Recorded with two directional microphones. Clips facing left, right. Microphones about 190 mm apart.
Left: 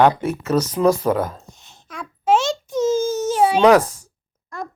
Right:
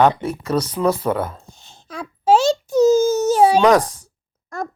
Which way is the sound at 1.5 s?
30° right (ahead or behind).